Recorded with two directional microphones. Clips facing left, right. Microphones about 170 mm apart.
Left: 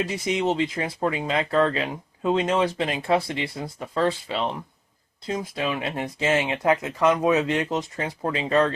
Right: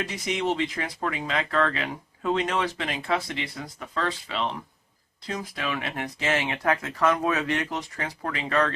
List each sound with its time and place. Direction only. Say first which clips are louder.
0.3 s speech: left 2 dB; 30° left (ahead or behind)
5.2 s speech: left 5 dB; 25° left (ahead or behind)